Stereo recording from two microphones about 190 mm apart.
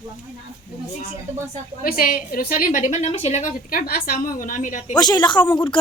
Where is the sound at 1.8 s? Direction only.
50° left (ahead or behind).